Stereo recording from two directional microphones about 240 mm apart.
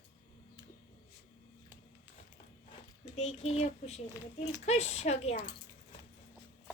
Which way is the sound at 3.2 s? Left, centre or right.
Left.